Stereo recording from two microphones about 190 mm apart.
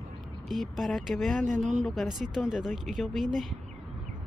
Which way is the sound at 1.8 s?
Centre (ahead or behind).